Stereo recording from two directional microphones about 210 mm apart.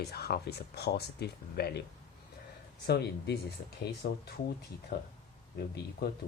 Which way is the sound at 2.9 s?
50° left (ahead or behind).